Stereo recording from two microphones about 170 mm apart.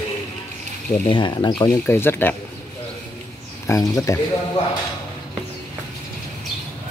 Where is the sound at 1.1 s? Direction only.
30° left (ahead or behind).